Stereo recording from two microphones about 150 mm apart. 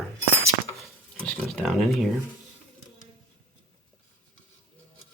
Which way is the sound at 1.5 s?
Centre (ahead or behind).